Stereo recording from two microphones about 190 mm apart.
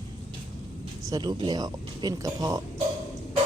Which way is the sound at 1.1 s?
20° right (ahead or behind).